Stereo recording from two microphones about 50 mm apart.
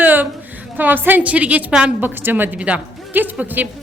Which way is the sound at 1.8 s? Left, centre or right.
Right.